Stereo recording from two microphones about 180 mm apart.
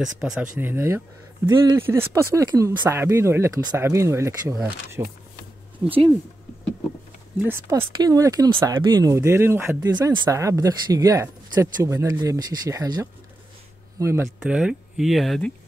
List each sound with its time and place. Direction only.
0.0 s speech: 5° right (ahead or behind)
5.9 s speech: 30° right (ahead or behind)
7.4 s speech: 15° right (ahead or behind)
14.4 s speech: 5° right (ahead or behind)